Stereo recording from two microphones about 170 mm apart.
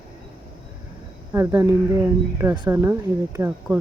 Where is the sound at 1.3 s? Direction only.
10° right (ahead or behind).